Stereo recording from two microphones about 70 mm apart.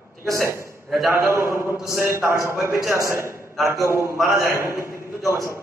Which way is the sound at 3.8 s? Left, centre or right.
Right.